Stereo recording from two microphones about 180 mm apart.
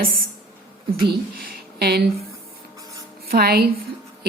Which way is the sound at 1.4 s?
55° right (ahead or behind).